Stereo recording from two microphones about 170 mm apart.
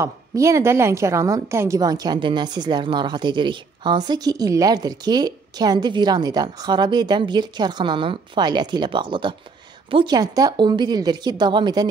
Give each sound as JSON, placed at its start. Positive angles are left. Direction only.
{"t": 0.0, "sound": "a woman's voice", "side_deg": -20}